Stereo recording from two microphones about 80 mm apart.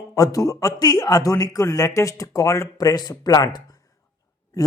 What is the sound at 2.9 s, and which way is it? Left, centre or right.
Speech, left.